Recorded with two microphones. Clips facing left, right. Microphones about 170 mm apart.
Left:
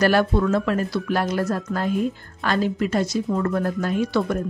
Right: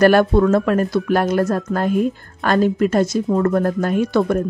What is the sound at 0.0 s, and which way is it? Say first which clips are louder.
Speech: right 6 dB; 50° right (ahead or behind).